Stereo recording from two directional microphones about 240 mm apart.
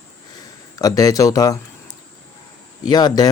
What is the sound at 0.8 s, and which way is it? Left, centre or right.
Speech, centre.